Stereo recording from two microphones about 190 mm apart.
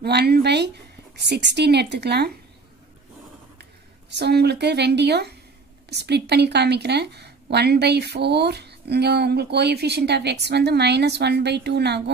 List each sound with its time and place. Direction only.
0.0 s a sound: 60° right (ahead or behind)
1.1 s a woman's voice: 65° right (ahead or behind)
4.1 s a woman's voice: 60° right (ahead or behind)